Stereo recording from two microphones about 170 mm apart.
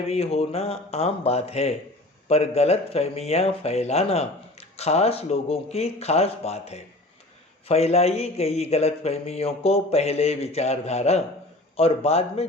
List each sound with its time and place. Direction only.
0.1 s speech: 35° left (ahead or behind)